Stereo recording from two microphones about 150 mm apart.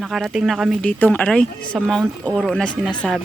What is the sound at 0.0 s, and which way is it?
Speech, centre (ahead or behind).